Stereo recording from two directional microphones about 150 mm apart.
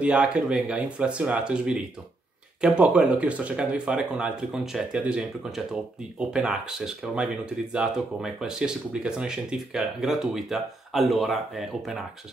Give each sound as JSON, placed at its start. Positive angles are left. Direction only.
{"t": 0.0, "sound": "speech", "side_deg": -5}